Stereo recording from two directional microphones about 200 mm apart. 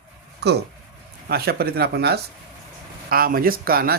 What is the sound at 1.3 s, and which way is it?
Speech, 50° right (ahead or behind).